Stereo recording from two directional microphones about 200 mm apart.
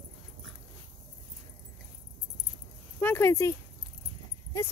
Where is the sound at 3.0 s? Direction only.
10° left (ahead or behind).